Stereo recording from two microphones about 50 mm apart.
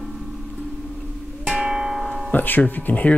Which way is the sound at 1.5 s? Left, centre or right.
Centre.